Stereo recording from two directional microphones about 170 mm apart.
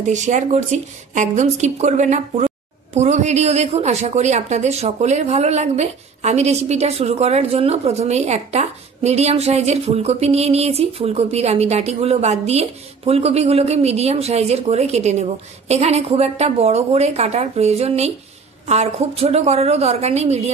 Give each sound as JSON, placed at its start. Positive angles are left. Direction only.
{"t": 0.0, "sound": "a woman's voice", "side_deg": -45}